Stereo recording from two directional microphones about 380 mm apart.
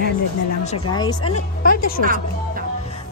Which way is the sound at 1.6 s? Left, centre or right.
Left.